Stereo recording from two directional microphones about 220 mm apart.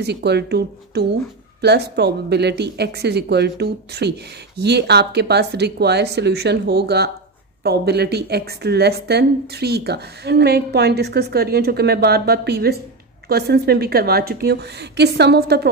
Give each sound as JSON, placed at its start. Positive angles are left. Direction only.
{"t": 0.0, "sound": "a woman's voice", "side_deg": -50}